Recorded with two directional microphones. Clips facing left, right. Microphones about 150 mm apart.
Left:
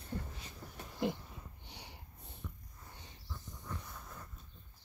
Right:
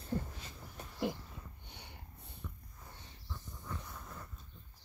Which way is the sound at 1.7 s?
10° left (ahead or behind).